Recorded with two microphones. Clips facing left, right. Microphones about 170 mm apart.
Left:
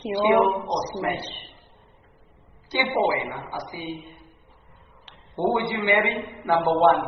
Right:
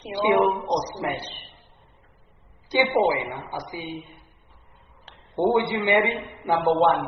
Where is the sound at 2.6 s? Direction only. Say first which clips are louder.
Right 2 dB; 20° right (ahead or behind).